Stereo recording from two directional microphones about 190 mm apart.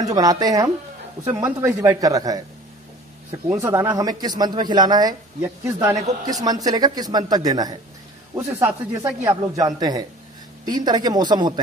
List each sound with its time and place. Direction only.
0.0 s a man's voice: 20° right (ahead or behind)